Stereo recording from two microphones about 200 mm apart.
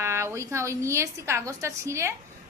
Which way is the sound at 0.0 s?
15° right (ahead or behind).